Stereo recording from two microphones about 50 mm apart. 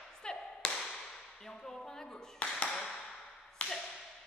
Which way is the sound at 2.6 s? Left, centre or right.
Centre.